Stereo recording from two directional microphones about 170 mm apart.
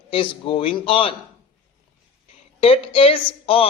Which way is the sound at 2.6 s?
35° left (ahead or behind).